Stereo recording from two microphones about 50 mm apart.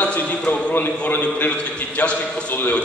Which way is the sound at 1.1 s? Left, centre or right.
Left.